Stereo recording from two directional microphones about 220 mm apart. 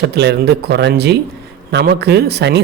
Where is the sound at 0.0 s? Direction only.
50° right (ahead or behind).